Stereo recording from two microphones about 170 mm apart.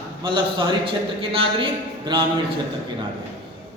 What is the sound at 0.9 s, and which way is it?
Speech, 30° right (ahead or behind).